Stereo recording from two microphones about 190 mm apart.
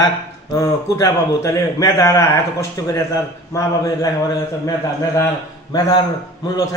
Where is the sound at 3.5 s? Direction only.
20° left (ahead or behind).